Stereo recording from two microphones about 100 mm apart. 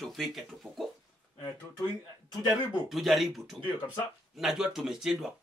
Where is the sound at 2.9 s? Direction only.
Centre (ahead or behind).